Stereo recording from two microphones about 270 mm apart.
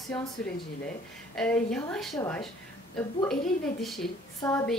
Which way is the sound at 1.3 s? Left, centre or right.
Centre.